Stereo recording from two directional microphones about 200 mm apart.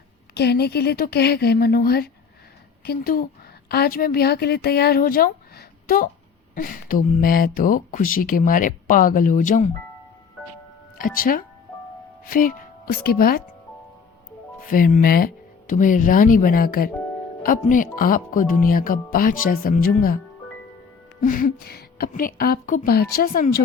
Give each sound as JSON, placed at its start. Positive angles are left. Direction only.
{"t": 0.3, "sound": "speech", "side_deg": 55}
{"t": 10.9, "sound": "speech", "side_deg": 45}
{"t": 14.6, "sound": "speech", "side_deg": 45}
{"t": 21.2, "sound": "speech", "side_deg": 45}